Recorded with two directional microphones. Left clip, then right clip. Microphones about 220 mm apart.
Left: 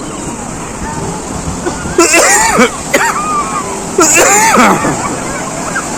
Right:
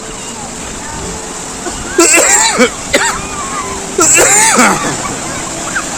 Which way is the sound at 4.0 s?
15° right (ahead or behind).